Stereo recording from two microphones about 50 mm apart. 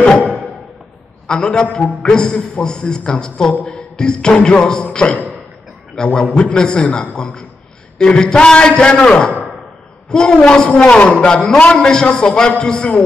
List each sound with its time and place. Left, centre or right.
1.2 s a man's voice: centre
5.9 s a man's voice: centre